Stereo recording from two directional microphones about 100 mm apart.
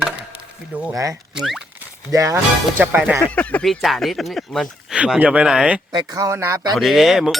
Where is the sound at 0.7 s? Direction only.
15° right (ahead or behind).